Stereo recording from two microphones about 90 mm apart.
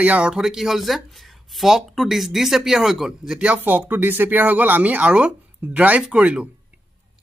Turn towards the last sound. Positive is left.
turn(degrees=-10)  # may be behind; listen again after turning